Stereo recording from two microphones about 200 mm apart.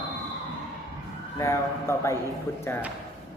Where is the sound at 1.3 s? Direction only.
15° left (ahead or behind).